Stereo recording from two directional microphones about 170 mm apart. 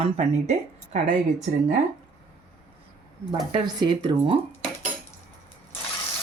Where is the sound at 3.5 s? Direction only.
25° right (ahead or behind).